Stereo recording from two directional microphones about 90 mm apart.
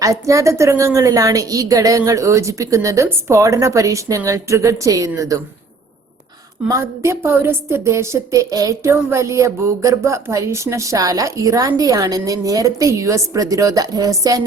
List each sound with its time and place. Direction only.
0.0 s speech: 35° right (ahead or behind)
6.7 s speech: 35° right (ahead or behind)
8.9 s speech: 30° right (ahead or behind)